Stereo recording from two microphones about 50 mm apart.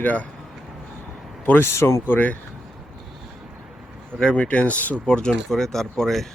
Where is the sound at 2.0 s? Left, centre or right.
Left.